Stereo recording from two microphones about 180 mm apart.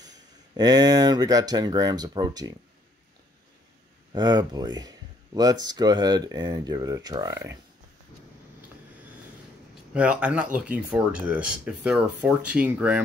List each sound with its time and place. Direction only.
0.0 s speech: 20° right (ahead or behind)
4.1 s speech: 20° right (ahead or behind)
9.9 s speech: 5° right (ahead or behind)